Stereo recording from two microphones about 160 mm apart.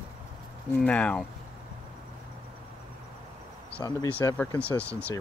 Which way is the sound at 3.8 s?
20° left (ahead or behind).